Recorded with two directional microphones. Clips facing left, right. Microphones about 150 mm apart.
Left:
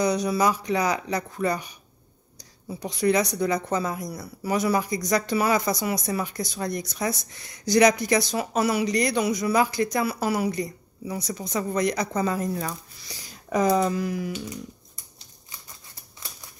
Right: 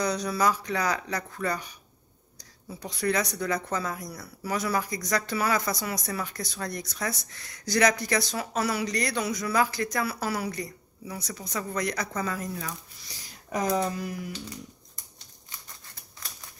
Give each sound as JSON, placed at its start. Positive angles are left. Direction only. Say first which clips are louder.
{"t": 0.0, "sound": "speech", "louder": "left 4 dB", "side_deg": 15}
{"t": 13.7, "sound": "speech", "louder": "left 5 dB", "side_deg": 90}